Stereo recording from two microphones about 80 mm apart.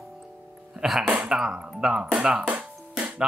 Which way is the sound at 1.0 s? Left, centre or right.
Centre.